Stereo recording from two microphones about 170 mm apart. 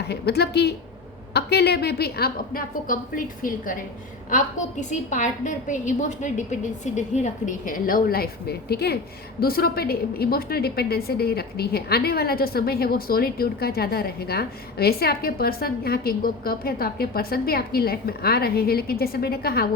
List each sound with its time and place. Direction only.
0.1 s a woman's voice: 75° left (ahead or behind); by 3.0 s 55° left (ahead or behind)
4.3 s a woman's voice: 45° left (ahead or behind); by 19.6 s 65° left (ahead or behind)